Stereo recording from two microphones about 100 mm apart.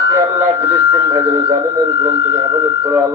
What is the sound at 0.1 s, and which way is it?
Speech, 25° right (ahead or behind).